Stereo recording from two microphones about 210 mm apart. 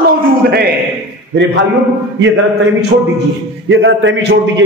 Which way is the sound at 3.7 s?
60° right (ahead or behind).